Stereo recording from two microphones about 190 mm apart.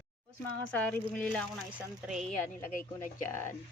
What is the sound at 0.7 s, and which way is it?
Speech, 10° left (ahead or behind).